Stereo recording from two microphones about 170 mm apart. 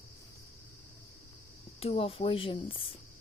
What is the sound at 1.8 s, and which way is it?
Speech, 35° left (ahead or behind).